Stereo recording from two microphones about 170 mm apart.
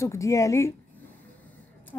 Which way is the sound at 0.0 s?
15° left (ahead or behind).